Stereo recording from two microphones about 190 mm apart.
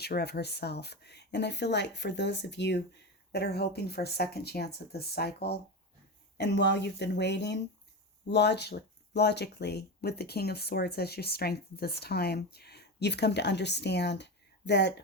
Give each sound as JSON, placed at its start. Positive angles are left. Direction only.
{"t": 0.0, "sound": "speech", "side_deg": 60}